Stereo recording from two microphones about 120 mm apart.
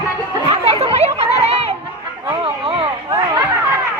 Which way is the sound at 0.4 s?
60° right (ahead or behind).